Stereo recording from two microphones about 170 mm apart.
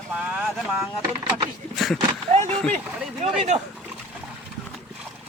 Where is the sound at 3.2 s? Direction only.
35° right (ahead or behind).